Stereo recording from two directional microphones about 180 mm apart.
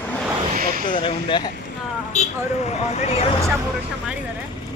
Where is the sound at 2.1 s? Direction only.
40° left (ahead or behind).